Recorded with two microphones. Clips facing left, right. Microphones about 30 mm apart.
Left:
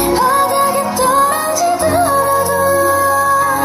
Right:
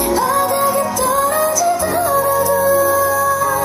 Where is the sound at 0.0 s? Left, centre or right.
Left.